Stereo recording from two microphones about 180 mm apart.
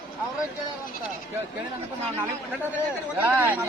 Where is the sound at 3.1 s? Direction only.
10° right (ahead or behind).